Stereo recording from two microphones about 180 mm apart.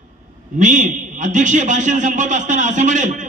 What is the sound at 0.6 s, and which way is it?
A man's voice, 45° right (ahead or behind).